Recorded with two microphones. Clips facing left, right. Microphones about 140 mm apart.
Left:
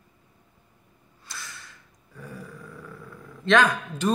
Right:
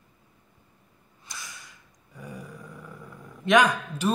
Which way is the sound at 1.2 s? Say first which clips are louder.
Left 1 dB; 15° right (ahead or behind).